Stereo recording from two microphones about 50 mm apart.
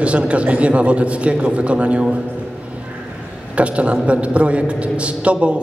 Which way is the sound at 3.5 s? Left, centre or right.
Right.